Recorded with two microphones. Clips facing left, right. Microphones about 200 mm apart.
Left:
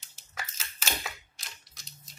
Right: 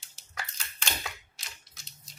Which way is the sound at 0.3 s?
5° left (ahead or behind).